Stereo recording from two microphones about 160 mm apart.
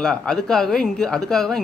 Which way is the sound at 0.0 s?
5° left (ahead or behind).